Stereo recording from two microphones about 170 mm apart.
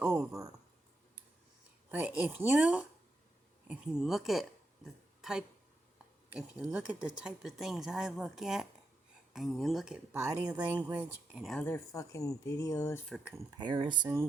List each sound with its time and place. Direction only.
1.9 s speech: 10° right (ahead or behind)
10.9 s speech: 5° right (ahead or behind)
11.5 s speech: 10° left (ahead or behind)
13.1 s speech: centre (ahead or behind)
13.3 s speech: 25° right (ahead or behind)